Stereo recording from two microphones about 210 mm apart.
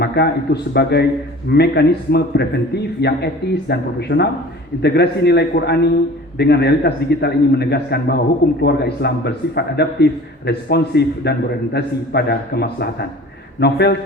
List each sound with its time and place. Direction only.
0.0 s a man's voice: 50° left (ahead or behind)